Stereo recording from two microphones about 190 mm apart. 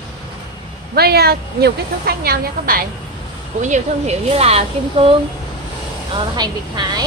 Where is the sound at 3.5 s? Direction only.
40° right (ahead or behind).